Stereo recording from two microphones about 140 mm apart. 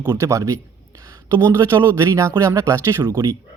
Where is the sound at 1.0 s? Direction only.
20° right (ahead or behind).